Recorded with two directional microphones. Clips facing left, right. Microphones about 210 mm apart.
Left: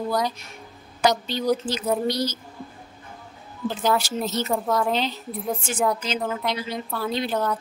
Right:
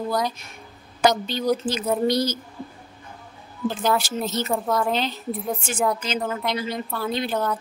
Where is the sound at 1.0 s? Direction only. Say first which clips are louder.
Right 1 dB; 50° right (ahead or behind).